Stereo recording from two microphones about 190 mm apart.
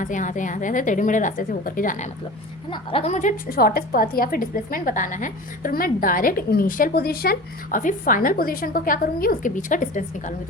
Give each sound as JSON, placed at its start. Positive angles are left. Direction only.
{"t": 0.0, "sound": "a woman's voice", "side_deg": 40}
{"t": 2.6, "sound": "a woman's voice", "side_deg": 30}